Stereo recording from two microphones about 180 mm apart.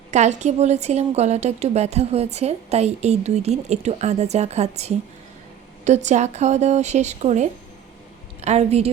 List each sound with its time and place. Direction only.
0.1 s a woman's voice: 40° right (ahead or behind)